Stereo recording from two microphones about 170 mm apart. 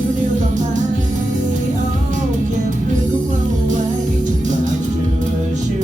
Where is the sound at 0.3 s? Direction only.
45° right (ahead or behind).